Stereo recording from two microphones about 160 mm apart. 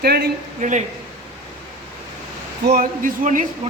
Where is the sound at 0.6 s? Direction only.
50° right (ahead or behind).